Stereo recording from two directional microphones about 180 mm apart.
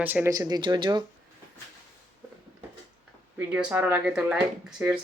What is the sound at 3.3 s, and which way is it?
Speech, 10° right (ahead or behind).